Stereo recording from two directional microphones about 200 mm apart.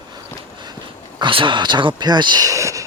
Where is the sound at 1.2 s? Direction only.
25° right (ahead or behind).